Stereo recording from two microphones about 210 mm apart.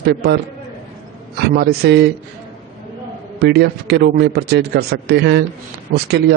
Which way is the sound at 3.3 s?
50° right (ahead or behind).